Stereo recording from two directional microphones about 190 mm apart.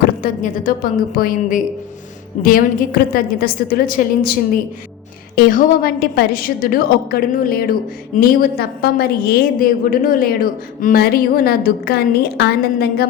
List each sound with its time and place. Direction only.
0.2 s a woman's voice: 45° left (ahead or behind)